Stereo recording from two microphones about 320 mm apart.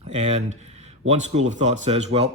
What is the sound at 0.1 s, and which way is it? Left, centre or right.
A man's voice, centre.